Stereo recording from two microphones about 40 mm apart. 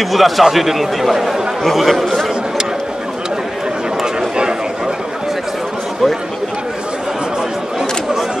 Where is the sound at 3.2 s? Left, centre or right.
Centre.